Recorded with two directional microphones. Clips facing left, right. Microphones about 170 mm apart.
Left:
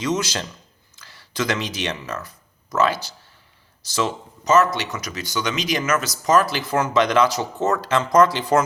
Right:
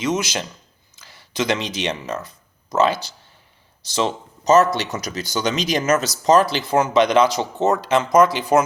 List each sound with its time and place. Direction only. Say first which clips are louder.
0.0 s speech: right 1 dB; 15° right (ahead or behind)
4.4 s speech: right 3 dB; 35° right (ahead or behind); by 8.6 s 15° right (ahead or behind)